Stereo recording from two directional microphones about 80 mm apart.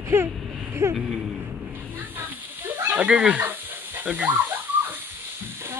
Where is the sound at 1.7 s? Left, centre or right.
Right.